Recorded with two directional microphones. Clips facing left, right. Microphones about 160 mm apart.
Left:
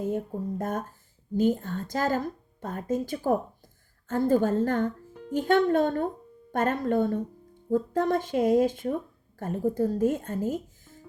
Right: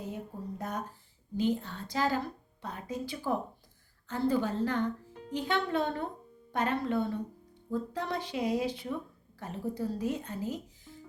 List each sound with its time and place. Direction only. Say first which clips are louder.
0.6 s a woman's voice: left 6 dB; 50° left (ahead or behind)